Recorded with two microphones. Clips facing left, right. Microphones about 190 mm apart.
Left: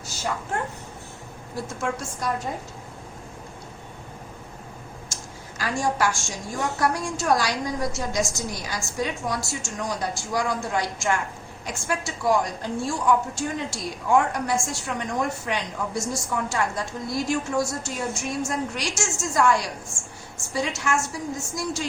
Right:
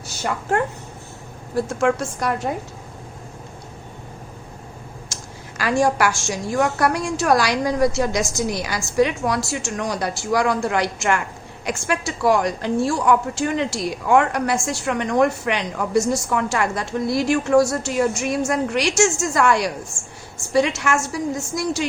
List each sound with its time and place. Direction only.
1.5 s a woman's voice: 70° right (ahead or behind)
5.5 s a woman's voice: 75° right (ahead or behind)